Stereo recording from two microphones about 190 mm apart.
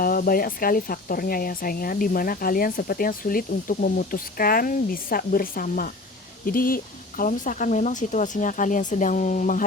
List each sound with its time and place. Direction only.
0.0 s speech: 50° left (ahead or behind)